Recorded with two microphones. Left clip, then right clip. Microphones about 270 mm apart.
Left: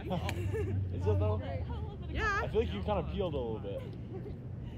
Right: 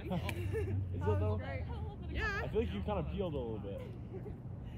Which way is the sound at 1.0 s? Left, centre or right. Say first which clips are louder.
Left 2 dB; left.